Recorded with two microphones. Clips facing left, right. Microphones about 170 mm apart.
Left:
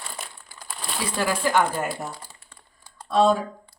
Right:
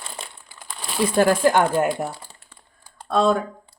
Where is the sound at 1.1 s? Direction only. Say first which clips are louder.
Right 6 dB; 50° right (ahead or behind).